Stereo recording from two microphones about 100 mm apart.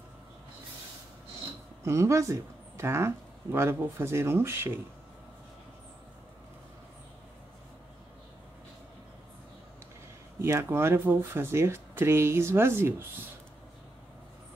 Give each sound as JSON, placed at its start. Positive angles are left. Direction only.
{"t": 1.9, "sound": "speech", "side_deg": -30}
{"t": 10.4, "sound": "speech", "side_deg": -25}